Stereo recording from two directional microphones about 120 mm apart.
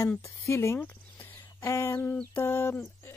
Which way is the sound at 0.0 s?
25° left (ahead or behind).